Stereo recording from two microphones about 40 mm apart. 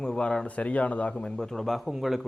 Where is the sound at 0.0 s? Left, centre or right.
Left.